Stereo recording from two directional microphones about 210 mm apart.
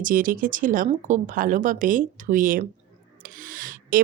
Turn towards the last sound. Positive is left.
turn(degrees=-40)  # may be behind; listen again after turning